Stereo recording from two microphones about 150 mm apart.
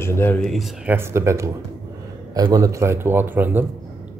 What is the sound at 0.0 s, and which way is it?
Speech, 15° left (ahead or behind).